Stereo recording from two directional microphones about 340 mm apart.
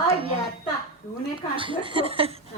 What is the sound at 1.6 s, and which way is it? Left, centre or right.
Speech, centre.